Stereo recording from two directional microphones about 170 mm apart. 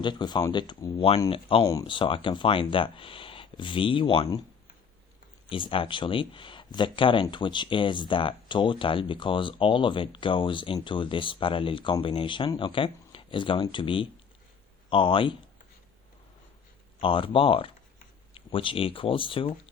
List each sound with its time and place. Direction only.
0.0 s speech: 25° left (ahead or behind)
5.5 s speech: 30° left (ahead or behind)
17.0 s speech: 30° left (ahead or behind)